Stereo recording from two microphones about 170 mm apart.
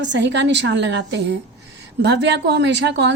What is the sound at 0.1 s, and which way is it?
A woman's voice, 90° right.